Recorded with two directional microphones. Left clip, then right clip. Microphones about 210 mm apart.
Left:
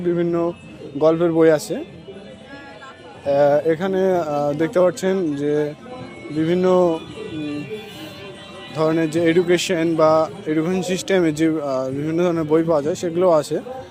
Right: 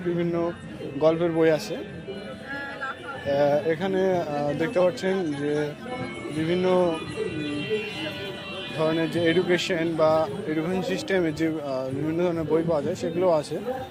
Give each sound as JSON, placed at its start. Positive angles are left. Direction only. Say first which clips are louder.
{"t": 0.2, "sound": "a man's voice", "louder": "left 6 dB", "side_deg": 50}
{"t": 3.2, "sound": "a man's voice", "louder": "left 6 dB", "side_deg": 55}
{"t": 8.8, "sound": "a man's voice", "louder": "left 6 dB", "side_deg": 55}